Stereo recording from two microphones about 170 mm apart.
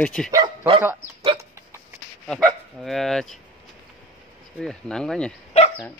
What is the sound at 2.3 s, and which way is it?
Speech, 5° left (ahead or behind).